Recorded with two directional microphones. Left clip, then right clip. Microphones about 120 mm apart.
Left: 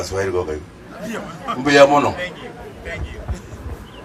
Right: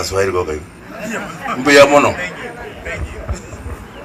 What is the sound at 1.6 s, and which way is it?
Speech, 25° right (ahead or behind).